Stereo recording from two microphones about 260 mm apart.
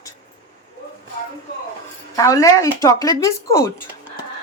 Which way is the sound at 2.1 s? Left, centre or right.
Centre.